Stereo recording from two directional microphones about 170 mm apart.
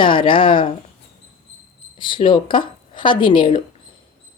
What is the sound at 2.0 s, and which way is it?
Speech, 30° left (ahead or behind).